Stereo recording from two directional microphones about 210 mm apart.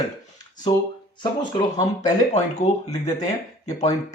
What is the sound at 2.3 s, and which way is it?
Speech, 35° left (ahead or behind).